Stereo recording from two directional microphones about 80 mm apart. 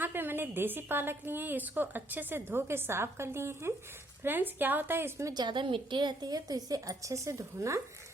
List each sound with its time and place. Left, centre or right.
0.0 s a woman's voice: right
5.3 s a woman's voice: right